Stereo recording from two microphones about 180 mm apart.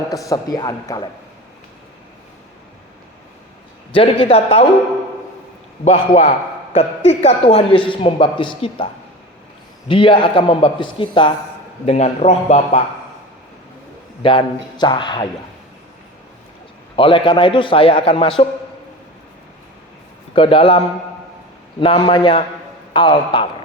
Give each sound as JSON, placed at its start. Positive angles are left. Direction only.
{"t": 0.1, "sound": "a man's voice", "side_deg": 20}
{"t": 3.9, "sound": "a man's voice", "side_deg": 30}
{"t": 5.8, "sound": "a man's voice", "side_deg": 35}
{"t": 9.9, "sound": "a man's voice", "side_deg": 30}
{"t": 11.9, "sound": "a man's voice", "side_deg": 40}
{"t": 14.2, "sound": "a man's voice", "side_deg": 25}
{"t": 17.0, "sound": "a man's voice", "side_deg": 30}
{"t": 20.3, "sound": "a man's voice", "side_deg": 30}